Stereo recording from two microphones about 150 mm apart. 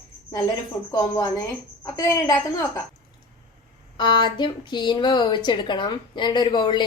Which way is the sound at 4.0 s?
30° left (ahead or behind).